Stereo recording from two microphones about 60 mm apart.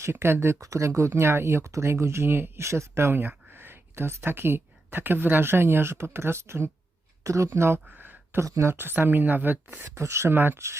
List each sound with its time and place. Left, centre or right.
0.0 s speech: right
0.6 s speech: right
0.9 s speech: right
7.3 s speech: right
7.9 s a sound: right
8.6 s speech: right
9.9 s speech: right
10.3 s speech: right